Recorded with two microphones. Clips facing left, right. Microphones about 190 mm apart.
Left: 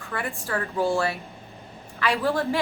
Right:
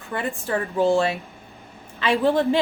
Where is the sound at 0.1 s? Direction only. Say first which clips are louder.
Right 4 dB; 20° right (ahead or behind).